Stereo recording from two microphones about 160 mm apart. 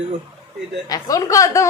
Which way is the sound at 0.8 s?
20° left (ahead or behind).